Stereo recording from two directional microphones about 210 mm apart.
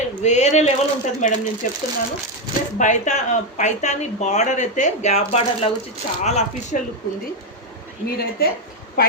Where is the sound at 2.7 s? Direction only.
35° left (ahead or behind).